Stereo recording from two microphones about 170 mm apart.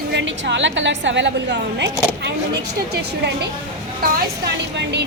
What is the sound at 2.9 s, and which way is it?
A woman's voice, 75° right (ahead or behind).